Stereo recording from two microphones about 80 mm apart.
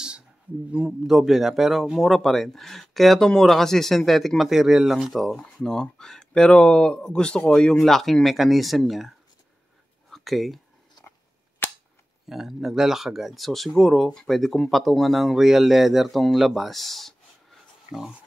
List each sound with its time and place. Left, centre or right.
0.7 s speech: centre
10.0 s whispering: centre
11.6 s cap gun: left
12.3 s speech: centre